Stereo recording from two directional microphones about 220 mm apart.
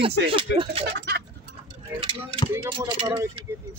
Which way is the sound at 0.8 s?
45° right (ahead or behind).